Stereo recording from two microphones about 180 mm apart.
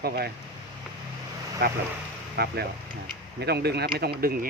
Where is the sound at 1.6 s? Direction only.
65° right (ahead or behind).